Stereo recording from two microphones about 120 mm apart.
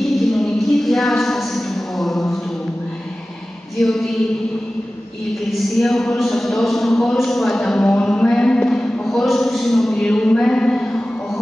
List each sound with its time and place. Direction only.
0.3 s a sound: centre (ahead or behind)
3.8 s speech: centre (ahead or behind)
5.8 s speech: centre (ahead or behind)